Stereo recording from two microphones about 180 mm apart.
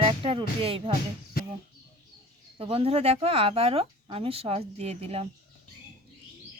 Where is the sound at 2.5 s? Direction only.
30° right (ahead or behind).